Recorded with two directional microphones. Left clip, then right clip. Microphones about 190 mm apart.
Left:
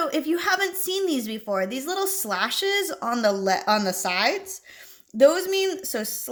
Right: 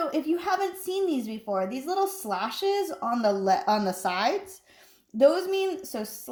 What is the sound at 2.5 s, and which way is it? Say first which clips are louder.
A woman's voice: left 3 dB; 20° left (ahead or behind).